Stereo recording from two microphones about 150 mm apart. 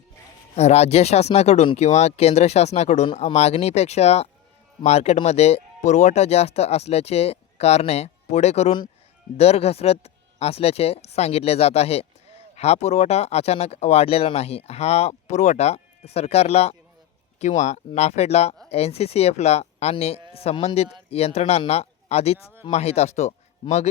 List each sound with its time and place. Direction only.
0.5 s speech: 45° left (ahead or behind)